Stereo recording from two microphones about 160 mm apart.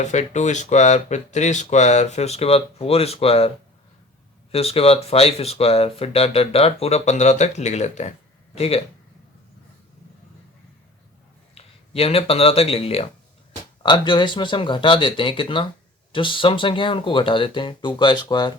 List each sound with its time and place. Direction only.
0.0 s speech: 45° left (ahead or behind)
4.5 s speech: 40° left (ahead or behind)
11.5 s speech: 35° left (ahead or behind)